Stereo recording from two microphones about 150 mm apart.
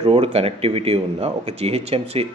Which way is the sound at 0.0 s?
40° right (ahead or behind).